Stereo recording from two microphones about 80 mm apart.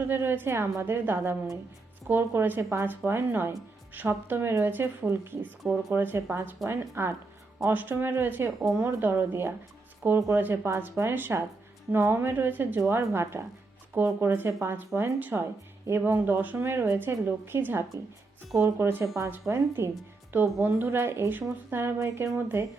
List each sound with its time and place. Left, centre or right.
0.1 s a woman's voice: right